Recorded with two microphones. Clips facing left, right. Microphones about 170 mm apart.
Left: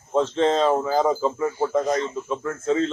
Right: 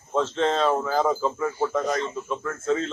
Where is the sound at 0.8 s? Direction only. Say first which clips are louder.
Left 2 dB; 15° left (ahead or behind).